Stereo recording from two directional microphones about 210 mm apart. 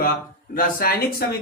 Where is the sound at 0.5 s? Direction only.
45° left (ahead or behind).